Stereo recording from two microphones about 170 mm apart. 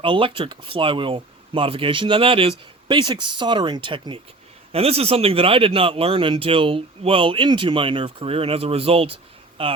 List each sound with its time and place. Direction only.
0.0 s speech: 30° right (ahead or behind)